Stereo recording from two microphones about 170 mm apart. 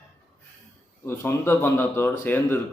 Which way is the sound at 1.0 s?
15° left (ahead or behind).